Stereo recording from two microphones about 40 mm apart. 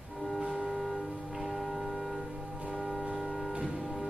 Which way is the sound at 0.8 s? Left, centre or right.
Centre.